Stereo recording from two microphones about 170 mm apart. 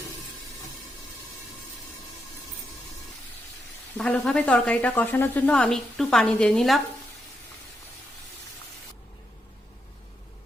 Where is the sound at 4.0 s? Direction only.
5° left (ahead or behind).